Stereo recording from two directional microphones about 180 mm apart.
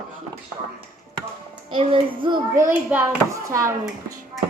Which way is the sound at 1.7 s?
30° right (ahead or behind).